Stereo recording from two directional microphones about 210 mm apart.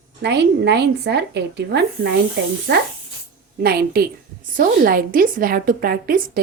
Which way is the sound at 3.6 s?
45° right (ahead or behind).